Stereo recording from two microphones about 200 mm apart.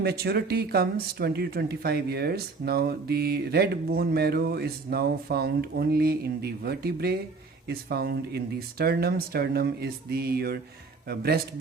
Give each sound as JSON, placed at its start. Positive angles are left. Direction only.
{"t": 0.0, "sound": "speech", "side_deg": -50}